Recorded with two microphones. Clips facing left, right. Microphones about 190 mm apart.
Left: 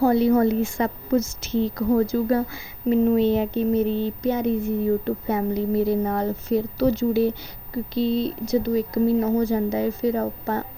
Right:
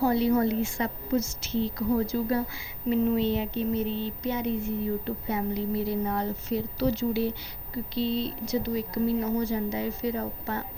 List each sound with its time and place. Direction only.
0.0 s speech: 50° left (ahead or behind)